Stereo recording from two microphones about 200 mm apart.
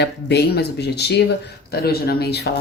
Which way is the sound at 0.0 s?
55° left (ahead or behind).